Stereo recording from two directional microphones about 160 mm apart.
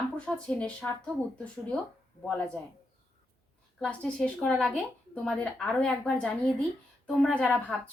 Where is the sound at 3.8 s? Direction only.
5° left (ahead or behind).